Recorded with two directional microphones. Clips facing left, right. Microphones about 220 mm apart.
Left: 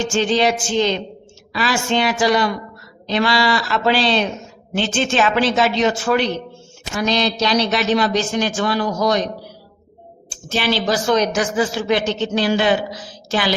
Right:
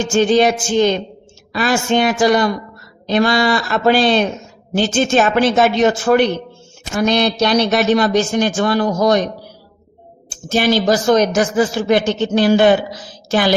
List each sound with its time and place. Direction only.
0.0 s a man's voice: 45° right (ahead or behind)